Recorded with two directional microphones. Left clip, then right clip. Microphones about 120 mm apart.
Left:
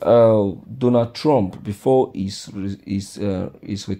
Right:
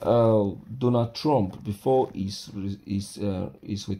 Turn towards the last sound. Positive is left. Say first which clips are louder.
# left 5 dB
turn(degrees=50)  # may be behind; listen again after turning